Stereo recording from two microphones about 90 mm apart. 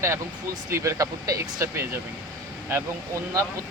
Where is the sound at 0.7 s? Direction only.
35° right (ahead or behind).